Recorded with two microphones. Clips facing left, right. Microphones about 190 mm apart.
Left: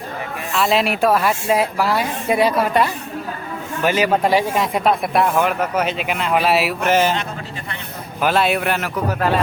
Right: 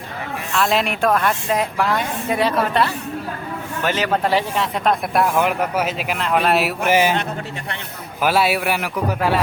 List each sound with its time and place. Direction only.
0.5 s a woman's voice: centre (ahead or behind)
6.8 s a man's voice: 10° right (ahead or behind)
8.2 s a man's voice: 5° right (ahead or behind)